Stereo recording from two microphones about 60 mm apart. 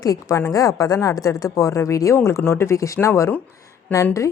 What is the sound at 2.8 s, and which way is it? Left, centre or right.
Speech, left.